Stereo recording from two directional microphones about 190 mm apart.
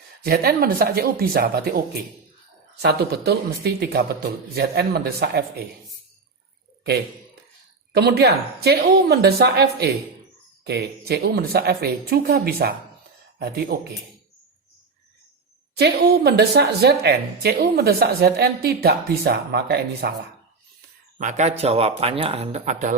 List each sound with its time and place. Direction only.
0.2 s speech: 55° right (ahead or behind)
2.8 s speech: 60° right (ahead or behind)
7.9 s speech: 60° right (ahead or behind)
13.7 s speech: 50° right (ahead or behind)
15.8 s speech: 55° right (ahead or behind)
21.2 s speech: 40° right (ahead or behind)